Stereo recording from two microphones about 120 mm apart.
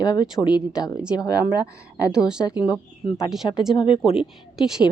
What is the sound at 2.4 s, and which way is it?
Speech, 35° left (ahead or behind).